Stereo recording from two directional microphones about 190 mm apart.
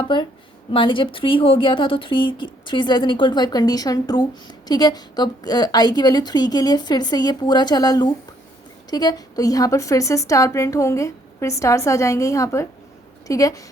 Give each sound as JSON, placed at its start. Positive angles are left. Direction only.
{"t": 0.0, "sound": "a woman's voice", "side_deg": 25}